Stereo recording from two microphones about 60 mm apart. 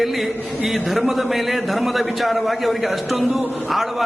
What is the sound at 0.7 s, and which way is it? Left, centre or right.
A man's voice, centre.